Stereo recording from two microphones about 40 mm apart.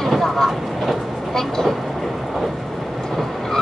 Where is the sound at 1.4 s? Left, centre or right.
Centre.